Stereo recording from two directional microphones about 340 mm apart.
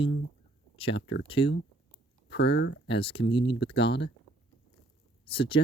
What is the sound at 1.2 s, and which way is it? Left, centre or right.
Speech, centre.